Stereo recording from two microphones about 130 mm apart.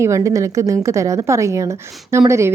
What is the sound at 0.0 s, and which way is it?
Speech, 25° right (ahead or behind).